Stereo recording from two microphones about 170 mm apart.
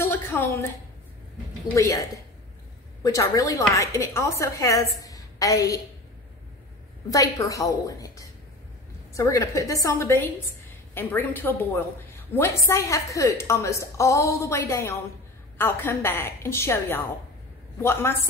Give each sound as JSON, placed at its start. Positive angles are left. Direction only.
{"t": 0.0, "sound": "a sound", "side_deg": 10}
{"t": 1.8, "sound": "a woman's voice", "side_deg": 20}
{"t": 7.1, "sound": "a woman's voice", "side_deg": 20}